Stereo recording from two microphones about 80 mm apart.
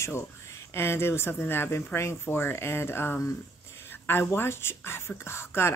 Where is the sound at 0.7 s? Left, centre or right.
Left.